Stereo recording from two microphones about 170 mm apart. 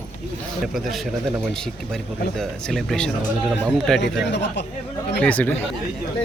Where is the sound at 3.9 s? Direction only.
90° left.